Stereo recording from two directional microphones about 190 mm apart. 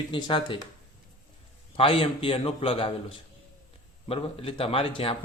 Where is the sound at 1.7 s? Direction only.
30° left (ahead or behind).